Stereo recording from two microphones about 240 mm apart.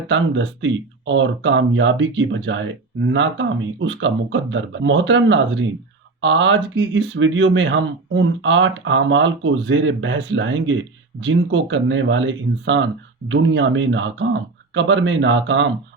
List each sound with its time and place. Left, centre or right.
0.1 s speech: right